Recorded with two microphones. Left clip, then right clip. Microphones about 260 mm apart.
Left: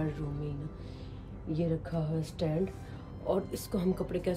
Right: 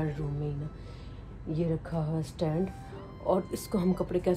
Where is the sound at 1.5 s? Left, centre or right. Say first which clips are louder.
Right 1 dB; right.